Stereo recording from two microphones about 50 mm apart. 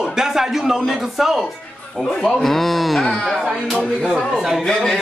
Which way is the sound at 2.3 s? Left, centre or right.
Centre.